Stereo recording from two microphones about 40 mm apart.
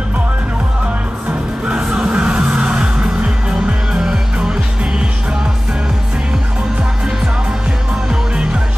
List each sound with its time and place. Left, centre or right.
1.7 s music: right